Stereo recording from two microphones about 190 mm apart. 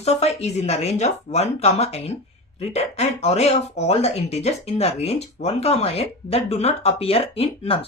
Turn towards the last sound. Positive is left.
turn(degrees=30)  # may be behind; listen again after turning